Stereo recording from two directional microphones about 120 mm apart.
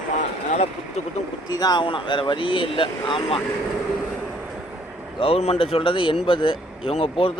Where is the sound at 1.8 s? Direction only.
45° left (ahead or behind).